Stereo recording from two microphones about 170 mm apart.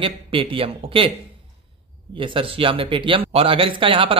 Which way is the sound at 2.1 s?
30° right (ahead or behind).